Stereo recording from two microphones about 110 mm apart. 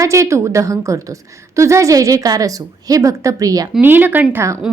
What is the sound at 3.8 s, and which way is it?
Speech, 15° right (ahead or behind).